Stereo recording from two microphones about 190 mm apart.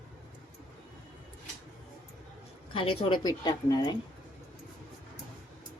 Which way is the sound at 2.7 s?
30° left (ahead or behind).